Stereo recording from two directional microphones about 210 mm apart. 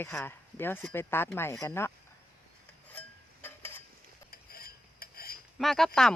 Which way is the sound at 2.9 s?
10° left (ahead or behind).